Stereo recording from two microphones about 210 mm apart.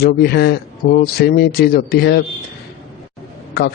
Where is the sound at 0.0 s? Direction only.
50° left (ahead or behind).